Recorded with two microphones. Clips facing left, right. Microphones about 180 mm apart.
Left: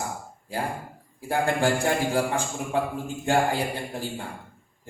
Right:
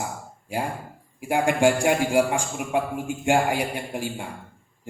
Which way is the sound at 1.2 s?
15° right (ahead or behind).